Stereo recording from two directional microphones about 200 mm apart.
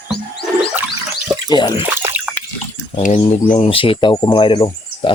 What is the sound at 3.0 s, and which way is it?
Speech, 35° left (ahead or behind).